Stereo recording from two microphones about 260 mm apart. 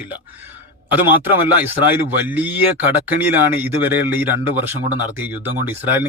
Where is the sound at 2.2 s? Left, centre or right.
Centre.